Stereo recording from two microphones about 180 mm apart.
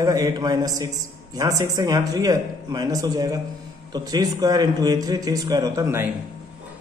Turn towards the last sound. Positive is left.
turn(degrees=-15)  # may be behind; listen again after turning